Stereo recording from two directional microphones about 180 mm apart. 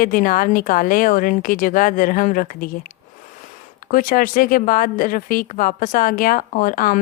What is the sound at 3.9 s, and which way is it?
Speech, 50° left (ahead or behind).